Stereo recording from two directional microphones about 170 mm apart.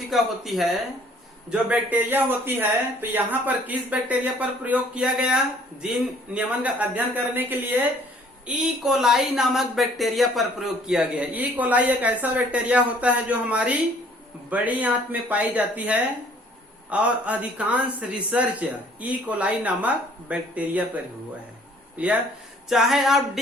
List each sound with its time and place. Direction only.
0.1 s speech: centre (ahead or behind)